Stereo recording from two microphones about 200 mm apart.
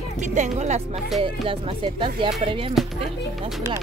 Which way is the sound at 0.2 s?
35° right (ahead or behind).